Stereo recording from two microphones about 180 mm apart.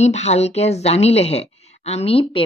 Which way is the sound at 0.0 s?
40° left (ahead or behind).